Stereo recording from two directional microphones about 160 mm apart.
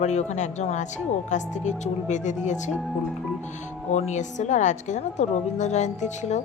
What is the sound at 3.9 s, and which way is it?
Speech, 45° left (ahead or behind).